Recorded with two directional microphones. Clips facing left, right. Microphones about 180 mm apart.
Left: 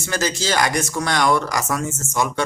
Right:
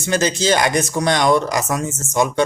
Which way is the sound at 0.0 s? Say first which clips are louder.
Right 5 dB; 20° right (ahead or behind).